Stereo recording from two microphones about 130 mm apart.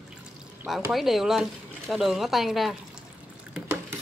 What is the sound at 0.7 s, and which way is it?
A woman's voice, centre (ahead or behind).